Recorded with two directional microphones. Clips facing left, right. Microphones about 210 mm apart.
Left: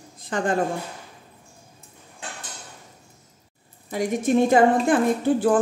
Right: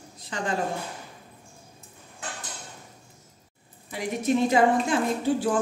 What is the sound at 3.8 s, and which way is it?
A woman's voice, 50° left (ahead or behind).